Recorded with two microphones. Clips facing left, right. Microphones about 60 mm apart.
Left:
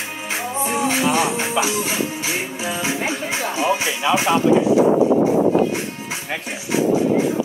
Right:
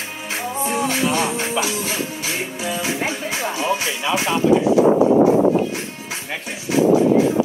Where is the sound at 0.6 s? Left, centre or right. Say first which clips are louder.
Left 1 dB; centre.